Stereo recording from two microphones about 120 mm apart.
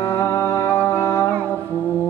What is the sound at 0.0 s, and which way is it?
Music, 30° left (ahead or behind).